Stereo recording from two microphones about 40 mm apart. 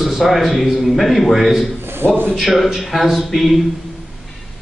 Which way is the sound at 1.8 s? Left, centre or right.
Right.